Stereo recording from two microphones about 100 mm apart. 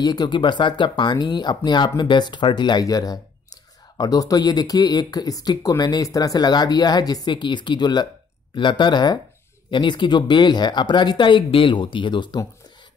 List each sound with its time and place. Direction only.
0.0 s speech: 45° left (ahead or behind)